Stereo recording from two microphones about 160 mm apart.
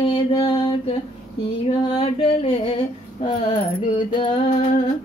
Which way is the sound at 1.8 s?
40° left (ahead or behind).